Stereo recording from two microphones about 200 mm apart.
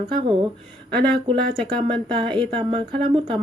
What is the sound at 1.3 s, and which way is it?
Speech, 30° right (ahead or behind).